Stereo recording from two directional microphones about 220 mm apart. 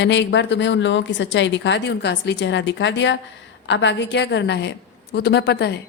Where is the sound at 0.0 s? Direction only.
50° left (ahead or behind).